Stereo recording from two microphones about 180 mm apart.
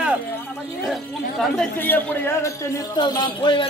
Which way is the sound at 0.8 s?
Centre (ahead or behind).